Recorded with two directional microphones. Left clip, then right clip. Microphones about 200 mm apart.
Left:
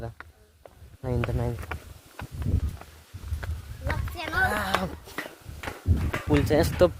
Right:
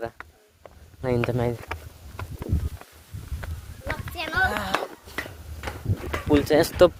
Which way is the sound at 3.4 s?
15° left (ahead or behind).